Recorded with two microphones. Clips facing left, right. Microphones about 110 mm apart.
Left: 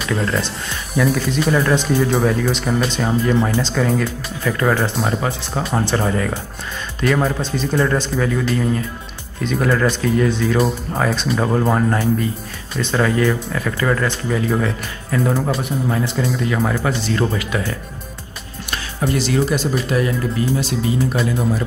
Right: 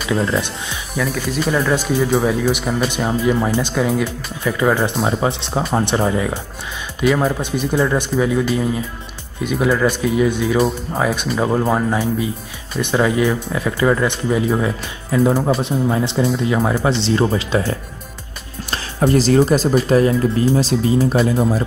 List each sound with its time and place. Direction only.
0.0 s speech: centre (ahead or behind)
4.9 s speech: centre (ahead or behind)
5.8 s speech: 15° right (ahead or behind); by 20.6 s 35° right (ahead or behind)